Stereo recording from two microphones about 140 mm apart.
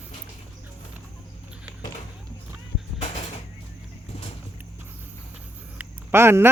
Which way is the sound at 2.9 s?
55° left (ahead or behind).